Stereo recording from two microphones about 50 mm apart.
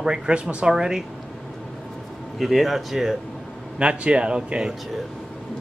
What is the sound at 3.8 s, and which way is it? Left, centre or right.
Speech, right.